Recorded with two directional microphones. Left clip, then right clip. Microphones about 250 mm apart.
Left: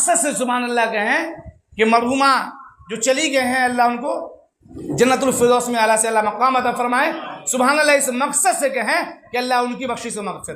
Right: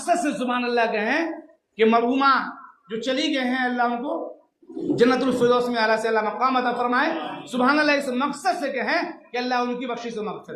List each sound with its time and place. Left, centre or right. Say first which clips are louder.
0.0 s a woman's voice: left 4 dB; left